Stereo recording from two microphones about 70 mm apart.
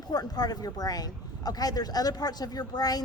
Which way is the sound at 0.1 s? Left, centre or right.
Left.